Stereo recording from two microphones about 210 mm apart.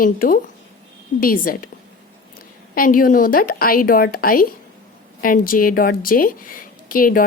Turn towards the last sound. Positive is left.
turn(degrees=40)  # may be behind; listen again after turning